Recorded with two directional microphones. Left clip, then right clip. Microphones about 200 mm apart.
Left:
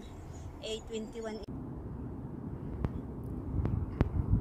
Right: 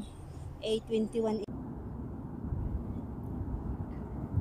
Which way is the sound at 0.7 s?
30° right (ahead or behind).